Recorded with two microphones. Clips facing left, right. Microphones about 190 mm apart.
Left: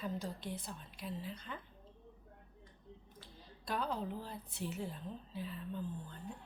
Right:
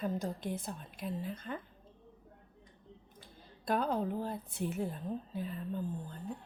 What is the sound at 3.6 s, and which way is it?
A woman's voice, 50° right (ahead or behind).